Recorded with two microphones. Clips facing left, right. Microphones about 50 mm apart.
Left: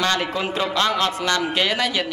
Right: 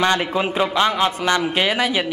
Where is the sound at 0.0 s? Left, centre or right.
Centre.